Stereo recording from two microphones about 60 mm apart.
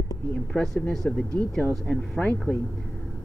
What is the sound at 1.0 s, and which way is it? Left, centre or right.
Speech, left.